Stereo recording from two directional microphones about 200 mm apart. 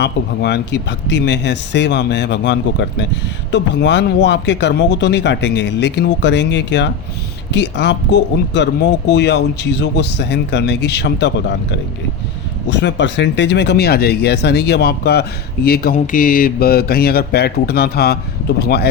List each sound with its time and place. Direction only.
0.0 s speech: 60° left (ahead or behind)
12.7 s speech: 65° left (ahead or behind)